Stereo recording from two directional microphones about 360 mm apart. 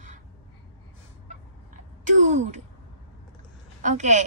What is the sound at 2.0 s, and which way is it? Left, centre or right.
Speech, centre.